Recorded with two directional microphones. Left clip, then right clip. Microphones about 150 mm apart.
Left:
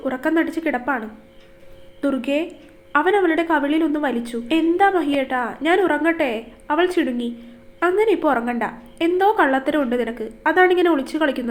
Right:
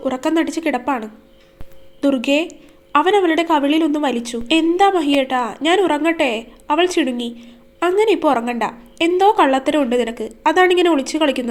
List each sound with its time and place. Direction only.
0.0 s a woman's voice: 40° right (ahead or behind)